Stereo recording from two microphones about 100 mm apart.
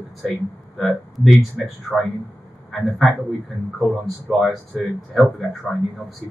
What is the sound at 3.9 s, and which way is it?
Speech, centre (ahead or behind).